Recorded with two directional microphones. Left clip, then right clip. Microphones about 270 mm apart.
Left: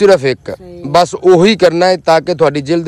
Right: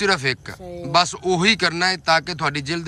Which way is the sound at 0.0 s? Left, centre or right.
Centre.